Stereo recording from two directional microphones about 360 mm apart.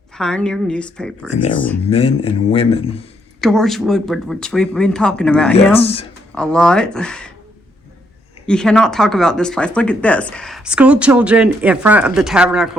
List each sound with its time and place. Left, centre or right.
0.2 s speech: centre
1.8 s speech: centre
3.4 s speech: centre
5.8 s speech: centre
6.3 s speech: centre
8.4 s speech: centre